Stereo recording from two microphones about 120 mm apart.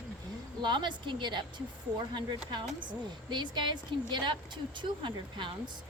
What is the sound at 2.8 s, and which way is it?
A woman's voice, 40° right (ahead or behind).